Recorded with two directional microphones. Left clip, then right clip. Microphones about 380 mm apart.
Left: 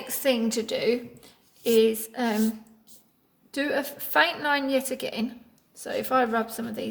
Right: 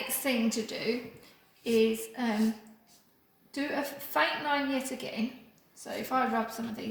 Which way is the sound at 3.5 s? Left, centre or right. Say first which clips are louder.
Left 6 dB; centre.